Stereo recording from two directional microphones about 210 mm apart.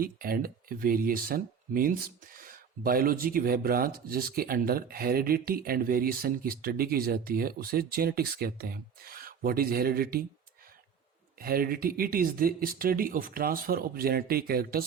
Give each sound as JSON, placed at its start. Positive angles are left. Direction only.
{"t": 0.0, "sound": "speech", "side_deg": -45}
{"t": 11.3, "sound": "speech", "side_deg": -45}